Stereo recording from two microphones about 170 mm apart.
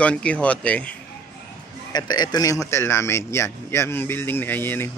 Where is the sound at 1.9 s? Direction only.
25° left (ahead or behind).